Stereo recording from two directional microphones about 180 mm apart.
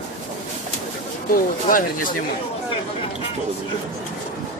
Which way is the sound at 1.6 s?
50° left (ahead or behind).